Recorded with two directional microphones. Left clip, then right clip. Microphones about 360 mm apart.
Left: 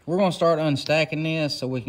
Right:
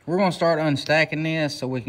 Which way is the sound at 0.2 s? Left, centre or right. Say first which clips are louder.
Even; centre.